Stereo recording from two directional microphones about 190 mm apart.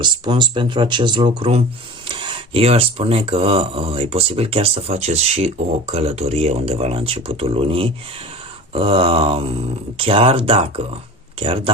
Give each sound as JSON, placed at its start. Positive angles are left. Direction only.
{"t": 0.0, "sound": "speech", "side_deg": -25}